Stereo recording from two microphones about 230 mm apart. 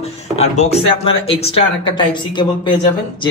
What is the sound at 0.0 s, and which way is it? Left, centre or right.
Speech, left.